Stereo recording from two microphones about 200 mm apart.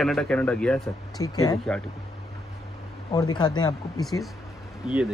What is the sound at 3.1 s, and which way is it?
Speech, 20° left (ahead or behind).